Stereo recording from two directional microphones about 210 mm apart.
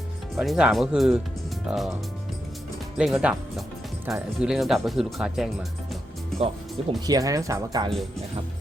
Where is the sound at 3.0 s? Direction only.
5° right (ahead or behind).